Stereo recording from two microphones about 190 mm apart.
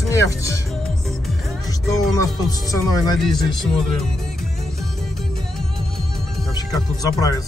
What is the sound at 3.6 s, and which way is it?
Speech, 5° left (ahead or behind).